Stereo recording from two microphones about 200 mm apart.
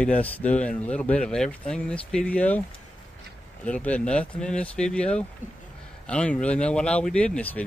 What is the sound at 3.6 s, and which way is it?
Speech, 5° left (ahead or behind).